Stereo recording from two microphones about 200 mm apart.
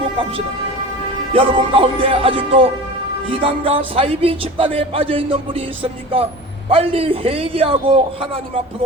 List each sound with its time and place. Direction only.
1.3 s speech: 30° right (ahead or behind)